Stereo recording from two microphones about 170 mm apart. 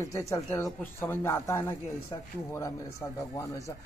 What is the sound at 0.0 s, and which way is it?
Speech, 20° left (ahead or behind).